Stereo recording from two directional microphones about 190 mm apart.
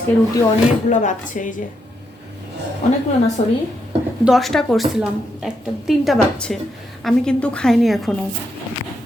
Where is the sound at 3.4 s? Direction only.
35° left (ahead or behind).